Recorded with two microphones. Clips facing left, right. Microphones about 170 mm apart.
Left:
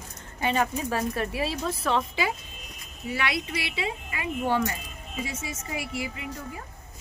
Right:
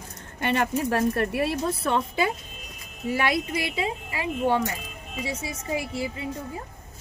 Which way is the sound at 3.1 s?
45° right (ahead or behind).